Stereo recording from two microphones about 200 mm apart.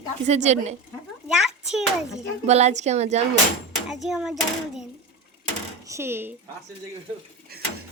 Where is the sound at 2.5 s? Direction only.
35° right (ahead or behind).